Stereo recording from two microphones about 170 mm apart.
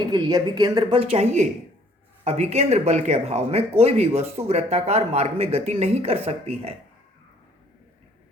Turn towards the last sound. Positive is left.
turn(degrees=-35)  # may be behind; listen again after turning